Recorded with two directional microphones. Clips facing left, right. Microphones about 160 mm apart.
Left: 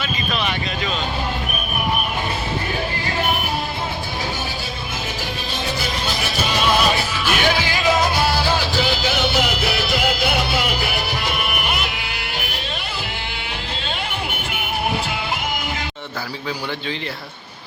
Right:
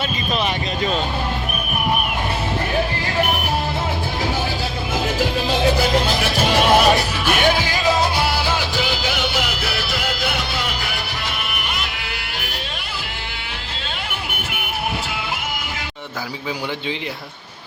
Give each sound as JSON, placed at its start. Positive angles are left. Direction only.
{"t": 5.5, "sound": "music", "side_deg": -90}
{"t": 6.9, "sound": "music", "side_deg": -45}
{"t": 8.7, "sound": "music", "side_deg": -10}